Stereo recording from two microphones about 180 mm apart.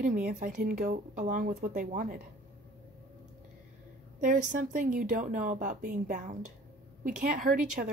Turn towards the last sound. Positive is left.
turn(degrees=-50)  # may be behind; listen again after turning